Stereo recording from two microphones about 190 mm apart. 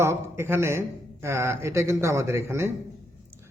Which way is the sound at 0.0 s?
15° right (ahead or behind).